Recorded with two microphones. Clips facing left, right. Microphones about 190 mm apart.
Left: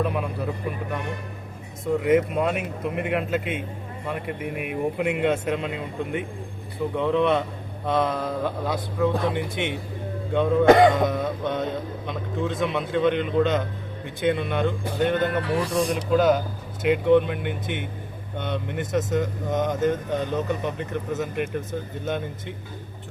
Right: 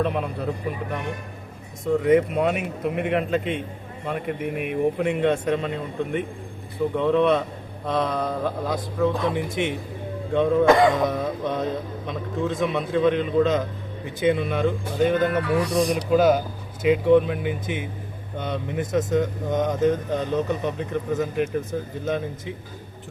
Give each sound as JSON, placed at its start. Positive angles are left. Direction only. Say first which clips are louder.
{"t": 1.8, "sound": "speech", "louder": "right 2 dB", "side_deg": 5}
{"t": 15.3, "sound": "speech", "louder": "right 2 dB", "side_deg": 30}
{"t": 16.0, "sound": "speech", "louder": "right 1 dB", "side_deg": -5}